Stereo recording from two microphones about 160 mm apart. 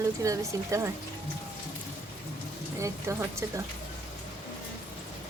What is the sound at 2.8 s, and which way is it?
Speech, 20° right (ahead or behind).